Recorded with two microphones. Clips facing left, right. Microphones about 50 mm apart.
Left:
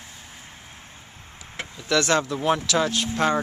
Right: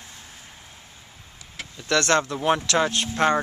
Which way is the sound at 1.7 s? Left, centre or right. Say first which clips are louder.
Right 1 dB; centre.